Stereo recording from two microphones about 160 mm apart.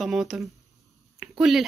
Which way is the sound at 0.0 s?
Centre (ahead or behind).